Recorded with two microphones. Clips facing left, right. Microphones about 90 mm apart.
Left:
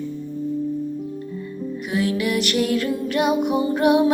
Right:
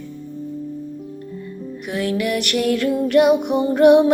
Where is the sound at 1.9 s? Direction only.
55° right (ahead or behind).